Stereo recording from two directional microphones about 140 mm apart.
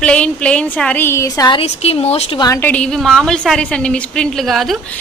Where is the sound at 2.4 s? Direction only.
20° left (ahead or behind).